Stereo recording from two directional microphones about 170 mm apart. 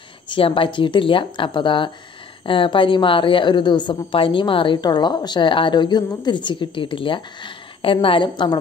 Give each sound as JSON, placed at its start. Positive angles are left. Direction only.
{"t": 0.3, "sound": "a woman's voice", "side_deg": 30}